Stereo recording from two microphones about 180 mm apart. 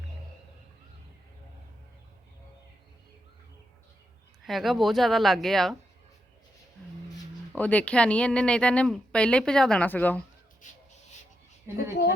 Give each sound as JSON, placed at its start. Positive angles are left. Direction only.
{"t": 4.4, "sound": "speech", "side_deg": 0}
{"t": 7.5, "sound": "speech", "side_deg": 10}
{"t": 10.6, "sound": "crow", "side_deg": 45}
{"t": 11.7, "sound": "speech", "side_deg": -15}